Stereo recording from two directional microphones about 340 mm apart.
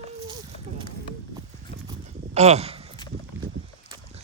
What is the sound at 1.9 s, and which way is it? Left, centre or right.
Horse, centre.